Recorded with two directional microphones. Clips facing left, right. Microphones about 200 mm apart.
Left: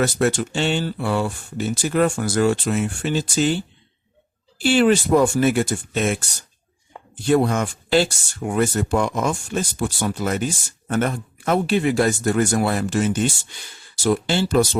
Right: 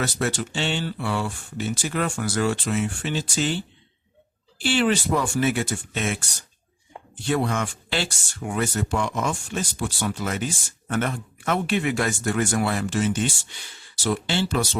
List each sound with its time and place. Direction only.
0.0 s speech: 50° left (ahead or behind)
7.3 s speech: 40° left (ahead or behind)